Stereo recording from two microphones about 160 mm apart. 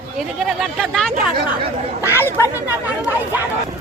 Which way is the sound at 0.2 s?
Centre (ahead or behind).